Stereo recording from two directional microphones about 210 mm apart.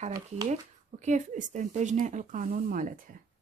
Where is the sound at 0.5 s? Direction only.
35° right (ahead or behind).